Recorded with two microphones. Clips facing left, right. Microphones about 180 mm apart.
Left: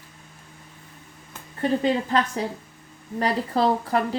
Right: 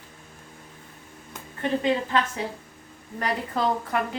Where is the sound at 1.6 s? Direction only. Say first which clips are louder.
Left 2 dB; 35° left (ahead or behind).